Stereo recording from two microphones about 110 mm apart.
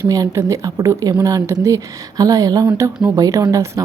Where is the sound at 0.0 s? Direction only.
30° right (ahead or behind).